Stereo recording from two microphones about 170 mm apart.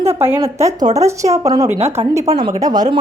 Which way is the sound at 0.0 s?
15° right (ahead or behind).